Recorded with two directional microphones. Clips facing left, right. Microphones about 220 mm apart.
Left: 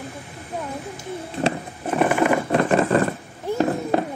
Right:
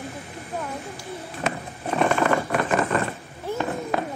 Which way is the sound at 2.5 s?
30° left (ahead or behind).